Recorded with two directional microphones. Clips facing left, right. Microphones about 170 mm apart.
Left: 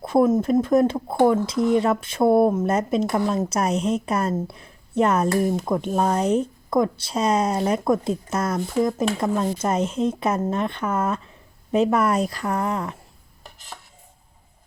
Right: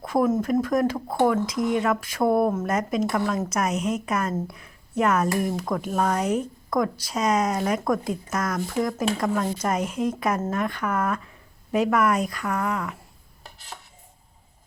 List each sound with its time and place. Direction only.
0.0 s speech: 30° left (ahead or behind)
0.9 s speech: 10° left (ahead or behind)
1.3 s a woman's voice: 30° left (ahead or behind)